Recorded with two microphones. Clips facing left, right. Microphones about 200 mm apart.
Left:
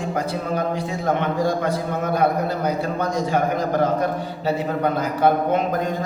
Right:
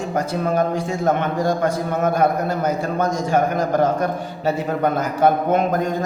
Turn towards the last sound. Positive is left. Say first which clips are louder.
# right 1 dB
turn(degrees=-45)  # may be behind; listen again after turning